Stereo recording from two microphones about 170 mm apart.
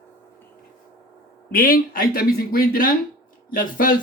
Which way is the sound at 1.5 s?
55° left (ahead or behind).